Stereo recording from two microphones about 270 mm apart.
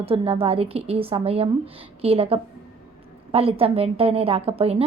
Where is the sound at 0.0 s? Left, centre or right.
Right.